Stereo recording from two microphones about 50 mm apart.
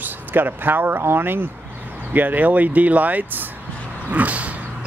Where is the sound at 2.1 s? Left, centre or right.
Right.